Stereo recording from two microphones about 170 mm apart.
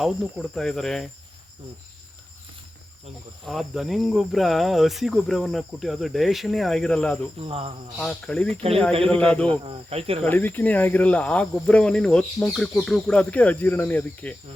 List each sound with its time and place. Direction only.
0.0 s cricket: centre (ahead or behind)
3.4 s cricket: centre (ahead or behind)
7.3 s speech: 35° right (ahead or behind)
7.9 s cricket: 5° left (ahead or behind)
9.0 s speech: 5° left (ahead or behind)
9.6 s speech: 35° right (ahead or behind)
10.2 s speech: 10° left (ahead or behind)